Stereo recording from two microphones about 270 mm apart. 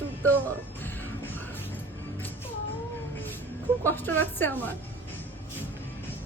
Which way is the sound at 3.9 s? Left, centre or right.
Centre.